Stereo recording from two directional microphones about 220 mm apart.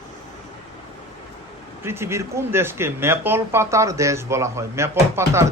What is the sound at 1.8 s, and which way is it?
Speech, 10° right (ahead or behind).